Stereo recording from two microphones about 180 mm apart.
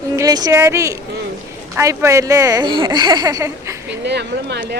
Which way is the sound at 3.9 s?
70° right (ahead or behind).